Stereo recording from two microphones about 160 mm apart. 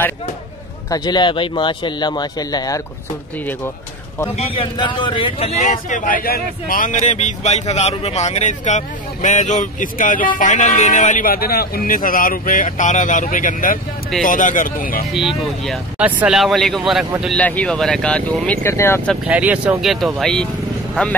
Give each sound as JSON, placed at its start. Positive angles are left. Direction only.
{"t": 0.8, "sound": "speech", "side_deg": 25}
{"t": 4.4, "sound": "a man's voice", "side_deg": 35}
{"t": 15.1, "sound": "speech", "side_deg": 0}
{"t": 19.2, "sound": "speech", "side_deg": -10}